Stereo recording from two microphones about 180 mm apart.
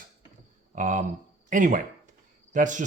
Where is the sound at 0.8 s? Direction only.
45° right (ahead or behind).